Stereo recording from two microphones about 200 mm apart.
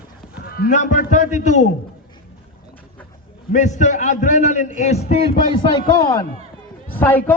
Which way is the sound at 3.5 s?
35° left (ahead or behind).